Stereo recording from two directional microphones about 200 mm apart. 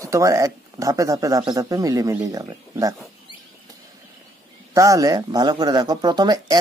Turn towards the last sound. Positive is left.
turn(degrees=-20)  # may be behind; listen again after turning